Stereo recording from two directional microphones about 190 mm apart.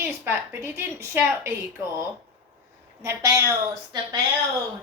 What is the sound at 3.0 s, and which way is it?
Speech, 15° right (ahead or behind).